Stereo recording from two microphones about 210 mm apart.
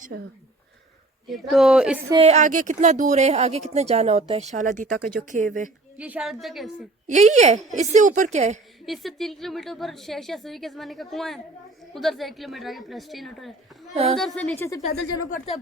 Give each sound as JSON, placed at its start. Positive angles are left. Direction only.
{"t": 1.3, "sound": "a woman's voice", "side_deg": 0}
{"t": 2.2, "sound": "speech", "side_deg": -35}
{"t": 6.0, "sound": "a woman's voice", "side_deg": -5}
{"t": 7.1, "sound": "speech", "side_deg": -35}
{"t": 8.9, "sound": "a woman's voice", "side_deg": 0}
{"t": 13.9, "sound": "a woman's voice", "side_deg": -30}
{"t": 14.2, "sound": "a woman's voice", "side_deg": 5}
{"t": 14.8, "sound": "speech", "side_deg": 30}